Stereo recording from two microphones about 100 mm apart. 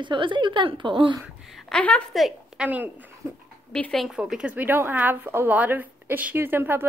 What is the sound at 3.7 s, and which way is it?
Speech, 5° left (ahead or behind).